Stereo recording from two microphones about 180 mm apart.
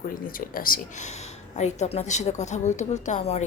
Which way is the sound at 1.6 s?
40° left (ahead or behind).